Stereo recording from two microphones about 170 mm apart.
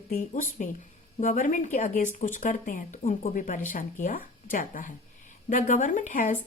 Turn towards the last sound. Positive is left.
turn(degrees=50)  # may be behind; listen again after turning